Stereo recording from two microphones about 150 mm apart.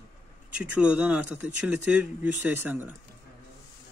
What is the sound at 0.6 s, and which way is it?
Speech, 10° right (ahead or behind).